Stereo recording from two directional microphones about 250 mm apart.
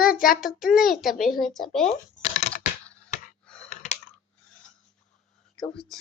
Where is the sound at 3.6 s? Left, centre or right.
Left.